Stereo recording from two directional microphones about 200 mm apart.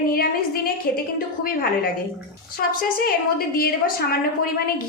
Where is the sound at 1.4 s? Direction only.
45° left (ahead or behind).